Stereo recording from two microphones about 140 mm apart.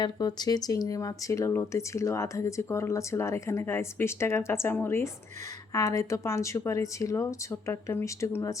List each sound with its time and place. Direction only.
0.0 s speech: 30° left (ahead or behind)